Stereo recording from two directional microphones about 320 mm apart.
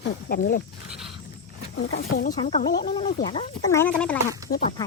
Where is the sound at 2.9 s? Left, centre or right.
Centre.